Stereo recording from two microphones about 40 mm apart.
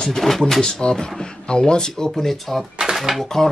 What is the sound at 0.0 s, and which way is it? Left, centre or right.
Speech, centre.